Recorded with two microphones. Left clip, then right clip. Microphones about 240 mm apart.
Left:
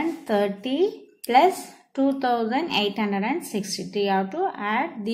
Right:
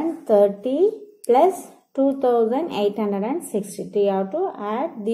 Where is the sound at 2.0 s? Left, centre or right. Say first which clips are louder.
Right 5 dB; left.